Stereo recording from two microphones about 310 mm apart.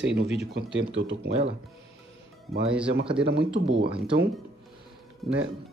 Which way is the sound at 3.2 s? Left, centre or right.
Right.